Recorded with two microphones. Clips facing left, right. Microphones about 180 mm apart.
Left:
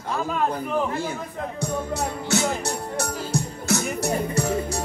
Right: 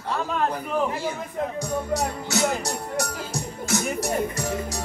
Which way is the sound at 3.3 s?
60° left (ahead or behind).